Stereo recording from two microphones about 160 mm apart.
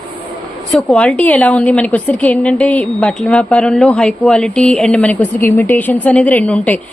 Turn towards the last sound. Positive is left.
turn(degrees=10)  # may be behind; listen again after turning